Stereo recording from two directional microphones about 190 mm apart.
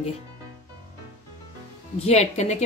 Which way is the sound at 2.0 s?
35° left (ahead or behind).